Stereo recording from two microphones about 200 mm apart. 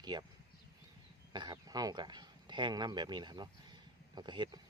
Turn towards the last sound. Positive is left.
turn(degrees=-20)  # may be behind; listen again after turning